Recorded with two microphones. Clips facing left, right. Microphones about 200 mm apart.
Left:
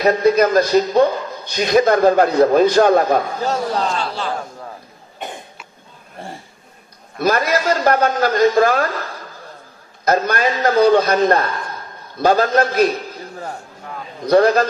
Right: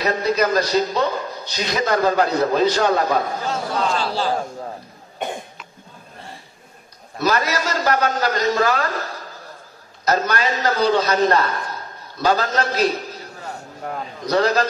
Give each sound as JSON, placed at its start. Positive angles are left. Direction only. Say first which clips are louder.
{"t": 0.0, "sound": "a man's voice", "louder": "left 6 dB", "side_deg": 50}
{"t": 4.0, "sound": "a man's voice", "louder": "right 2 dB", "side_deg": -35}
{"t": 7.2, "sound": "a man's voice", "louder": "left 3 dB", "side_deg": 50}
{"t": 10.0, "sound": "a man's voice", "louder": "left 3 dB", "side_deg": 50}
{"t": 14.2, "sound": "a man's voice", "louder": "left 6 dB", "side_deg": 50}